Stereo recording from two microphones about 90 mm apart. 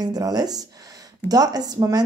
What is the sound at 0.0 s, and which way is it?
Speech, 45° right (ahead or behind).